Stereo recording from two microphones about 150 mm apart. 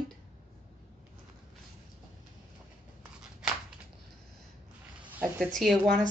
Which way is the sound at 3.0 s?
5° right (ahead or behind).